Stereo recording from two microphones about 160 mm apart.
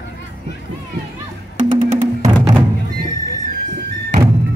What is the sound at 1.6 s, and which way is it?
Music, 50° right (ahead or behind).